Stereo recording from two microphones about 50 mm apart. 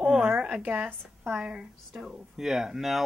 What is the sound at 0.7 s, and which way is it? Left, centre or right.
Speech, right.